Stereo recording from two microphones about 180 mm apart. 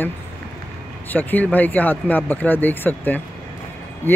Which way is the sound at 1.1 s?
10° left (ahead or behind).